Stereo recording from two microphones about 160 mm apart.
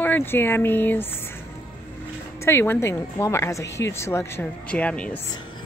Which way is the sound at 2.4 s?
15° left (ahead or behind).